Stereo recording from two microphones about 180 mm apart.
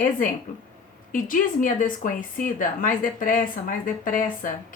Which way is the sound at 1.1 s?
50° left (ahead or behind).